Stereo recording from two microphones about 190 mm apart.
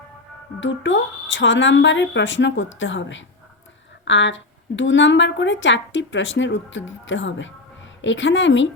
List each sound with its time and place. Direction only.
0.6 s a woman's voice: 75° left (ahead or behind)